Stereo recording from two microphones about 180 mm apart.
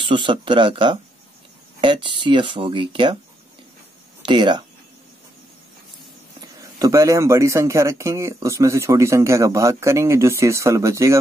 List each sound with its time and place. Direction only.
0.0 s speech: 25° right (ahead or behind)
4.3 s speech: 25° right (ahead or behind)
6.4 s a man's voice: 20° right (ahead or behind)